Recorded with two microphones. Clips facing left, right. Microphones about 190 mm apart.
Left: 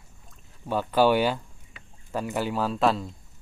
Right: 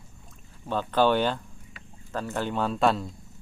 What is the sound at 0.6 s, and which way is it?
Speech, 10° left (ahead or behind).